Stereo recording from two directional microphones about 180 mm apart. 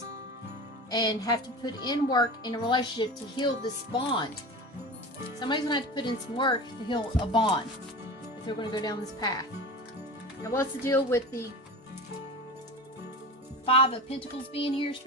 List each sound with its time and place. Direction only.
0.9 s a woman's voice: 20° left (ahead or behind)
5.4 s a woman's voice: 25° left (ahead or behind)
13.7 s a woman's voice: 30° left (ahead or behind)